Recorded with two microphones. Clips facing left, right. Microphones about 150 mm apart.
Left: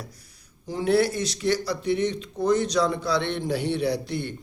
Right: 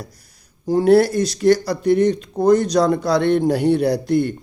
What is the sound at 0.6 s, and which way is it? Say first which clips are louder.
A man's voice: right 8 dB; 45° right (ahead or behind).